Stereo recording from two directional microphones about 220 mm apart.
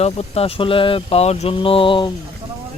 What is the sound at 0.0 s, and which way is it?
Speech, 25° left (ahead or behind).